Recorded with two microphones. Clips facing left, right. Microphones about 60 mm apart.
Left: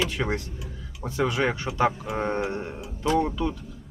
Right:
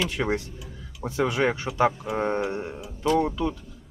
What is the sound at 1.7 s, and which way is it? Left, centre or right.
Speech, centre.